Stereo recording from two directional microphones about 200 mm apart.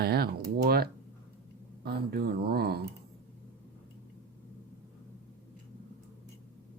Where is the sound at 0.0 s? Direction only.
50° right (ahead or behind).